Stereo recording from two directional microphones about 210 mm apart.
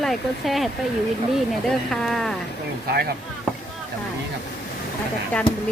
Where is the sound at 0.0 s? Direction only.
Centre (ahead or behind).